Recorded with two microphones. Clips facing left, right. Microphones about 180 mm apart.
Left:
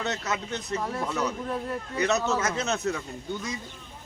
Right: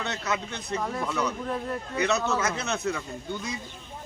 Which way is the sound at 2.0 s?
40° left (ahead or behind).